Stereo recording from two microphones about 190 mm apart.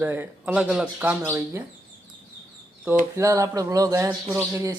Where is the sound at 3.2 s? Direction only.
15° right (ahead or behind).